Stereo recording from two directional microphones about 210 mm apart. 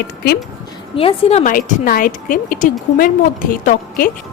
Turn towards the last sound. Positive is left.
turn(degrees=40)  # may be behind; listen again after turning